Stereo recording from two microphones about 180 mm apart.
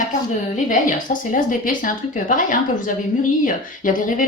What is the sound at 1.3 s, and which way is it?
Speech, 50° left (ahead or behind).